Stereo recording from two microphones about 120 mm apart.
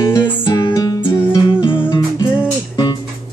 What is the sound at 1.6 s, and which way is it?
Music, 40° left (ahead or behind).